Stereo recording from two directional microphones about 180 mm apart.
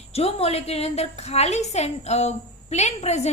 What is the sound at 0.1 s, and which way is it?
A woman's voice, 35° left (ahead or behind).